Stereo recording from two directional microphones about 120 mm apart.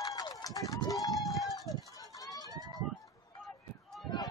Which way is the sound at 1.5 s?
30° left (ahead or behind).